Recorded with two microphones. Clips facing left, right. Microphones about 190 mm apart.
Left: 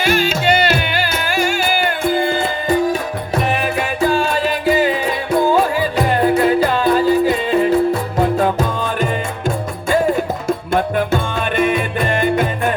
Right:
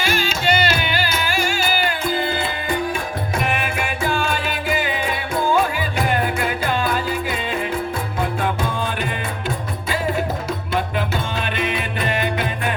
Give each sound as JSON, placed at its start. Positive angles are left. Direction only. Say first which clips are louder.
{"t": 1.4, "sound": "music", "louder": "left 5 dB", "side_deg": 50}
{"t": 6.1, "sound": "music", "louder": "left 9 dB", "side_deg": 35}
{"t": 10.9, "sound": "music", "louder": "left 6 dB", "side_deg": 50}